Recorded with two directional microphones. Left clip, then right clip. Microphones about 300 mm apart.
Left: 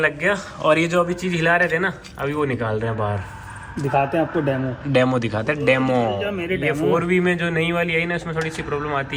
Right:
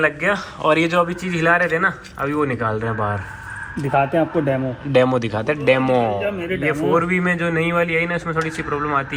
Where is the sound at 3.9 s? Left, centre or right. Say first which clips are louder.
Right 2 dB; right.